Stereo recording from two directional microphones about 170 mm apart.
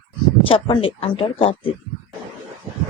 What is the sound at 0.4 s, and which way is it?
Speech, 30° left (ahead or behind).